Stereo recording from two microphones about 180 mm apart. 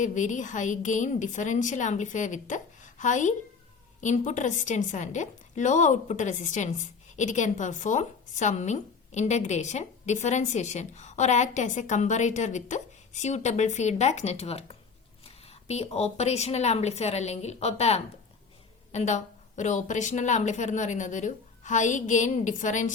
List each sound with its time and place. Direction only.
0.0 s a woman's voice: 45° left (ahead or behind)